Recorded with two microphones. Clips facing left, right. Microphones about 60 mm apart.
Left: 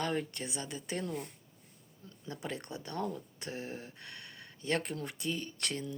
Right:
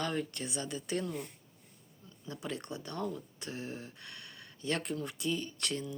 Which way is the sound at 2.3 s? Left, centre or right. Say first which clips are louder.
Right 1 dB; left.